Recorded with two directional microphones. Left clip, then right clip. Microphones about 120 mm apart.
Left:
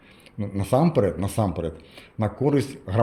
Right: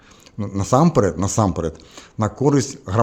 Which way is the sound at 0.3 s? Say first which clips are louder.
Right 5 dB; 50° right (ahead or behind).